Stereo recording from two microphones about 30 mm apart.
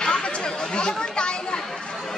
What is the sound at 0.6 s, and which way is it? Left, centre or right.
Speech, left.